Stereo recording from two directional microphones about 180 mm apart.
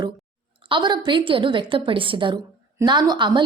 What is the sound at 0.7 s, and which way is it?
A woman's voice, 25° right (ahead or behind).